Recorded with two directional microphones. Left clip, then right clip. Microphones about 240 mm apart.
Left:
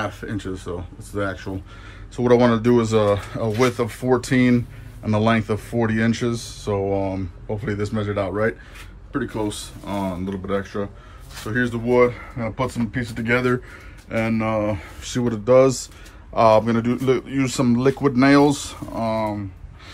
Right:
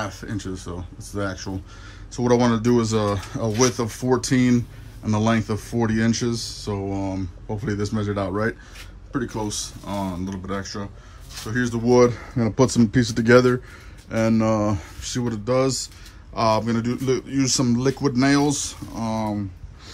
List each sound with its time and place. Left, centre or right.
0.0 s speech: centre
11.8 s speech: right
15.0 s speech: centre